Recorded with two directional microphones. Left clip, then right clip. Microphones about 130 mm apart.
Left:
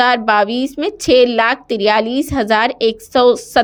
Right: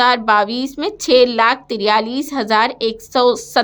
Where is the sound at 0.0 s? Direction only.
15° left (ahead or behind).